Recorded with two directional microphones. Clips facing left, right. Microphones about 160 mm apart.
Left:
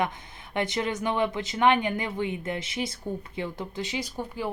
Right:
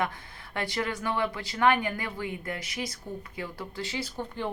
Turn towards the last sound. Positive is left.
turn(degrees=10)  # may be behind; listen again after turning